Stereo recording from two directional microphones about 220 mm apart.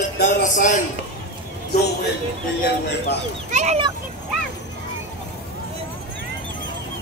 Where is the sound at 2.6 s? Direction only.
50° left (ahead or behind).